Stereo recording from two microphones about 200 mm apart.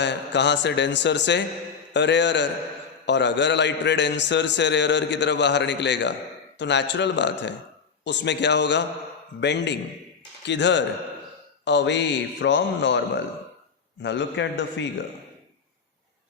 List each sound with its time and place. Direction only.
0.0 s a man's voice: 60° left (ahead or behind)
14.0 s a man's voice: 65° left (ahead or behind)